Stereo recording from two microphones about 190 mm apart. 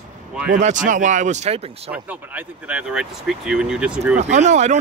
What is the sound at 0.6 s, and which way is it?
Speech, 40° right (ahead or behind).